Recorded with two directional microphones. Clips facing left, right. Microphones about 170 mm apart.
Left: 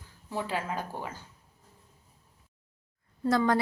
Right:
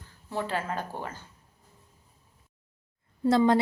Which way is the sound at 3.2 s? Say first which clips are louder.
Right 4 dB; 25° right (ahead or behind).